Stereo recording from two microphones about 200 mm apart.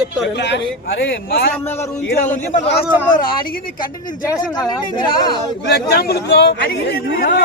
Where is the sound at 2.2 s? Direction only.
35° left (ahead or behind).